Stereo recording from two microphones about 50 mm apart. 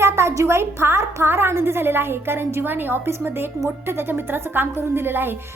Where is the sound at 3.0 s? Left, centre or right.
Right.